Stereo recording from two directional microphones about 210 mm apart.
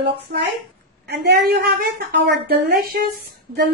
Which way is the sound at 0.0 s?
55° right (ahead or behind).